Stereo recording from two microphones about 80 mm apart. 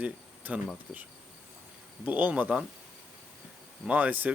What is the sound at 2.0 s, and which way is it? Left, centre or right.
Speech, centre.